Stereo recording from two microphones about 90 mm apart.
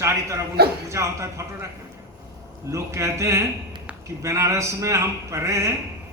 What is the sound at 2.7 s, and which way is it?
A man's voice, 35° right (ahead or behind).